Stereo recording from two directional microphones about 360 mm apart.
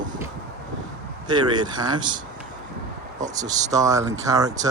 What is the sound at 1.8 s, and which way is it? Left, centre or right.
Speech, centre.